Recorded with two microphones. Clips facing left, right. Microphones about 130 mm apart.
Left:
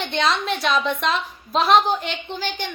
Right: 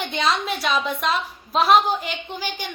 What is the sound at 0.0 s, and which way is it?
A woman's voice, 5° right (ahead or behind).